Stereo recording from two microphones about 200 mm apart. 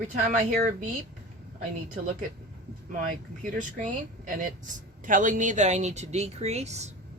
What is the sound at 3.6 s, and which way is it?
Speech, 40° right (ahead or behind).